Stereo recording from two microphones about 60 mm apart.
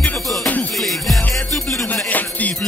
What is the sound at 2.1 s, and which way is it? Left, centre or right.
Music, left.